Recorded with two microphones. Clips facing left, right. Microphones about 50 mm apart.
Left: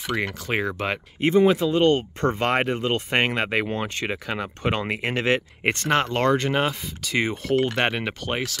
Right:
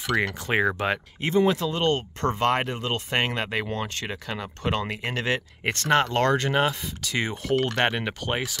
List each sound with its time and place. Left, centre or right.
0.0 s speech: centre
0.5 s speech: centre
1.2 s speech: centre